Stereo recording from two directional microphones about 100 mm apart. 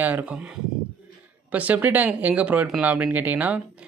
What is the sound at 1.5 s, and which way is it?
Speech, 15° right (ahead or behind).